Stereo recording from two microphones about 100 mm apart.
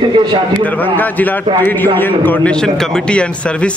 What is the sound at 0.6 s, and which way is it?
A man's voice, 15° left (ahead or behind).